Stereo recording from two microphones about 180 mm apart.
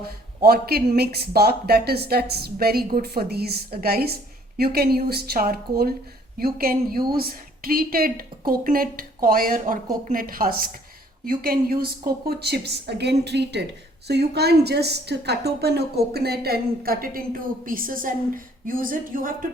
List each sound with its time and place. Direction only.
0.4 s a woman's voice: 60° right (ahead or behind)